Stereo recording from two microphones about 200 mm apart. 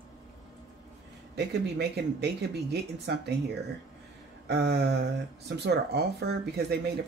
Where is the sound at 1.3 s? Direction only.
55° right (ahead or behind).